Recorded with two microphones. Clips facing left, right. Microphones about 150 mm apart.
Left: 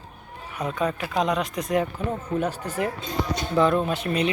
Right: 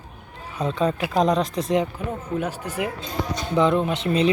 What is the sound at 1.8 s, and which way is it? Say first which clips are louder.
Speech: even; 10° right (ahead or behind).